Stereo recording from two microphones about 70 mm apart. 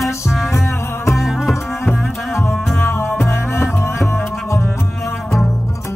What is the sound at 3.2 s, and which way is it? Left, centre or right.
Music, left.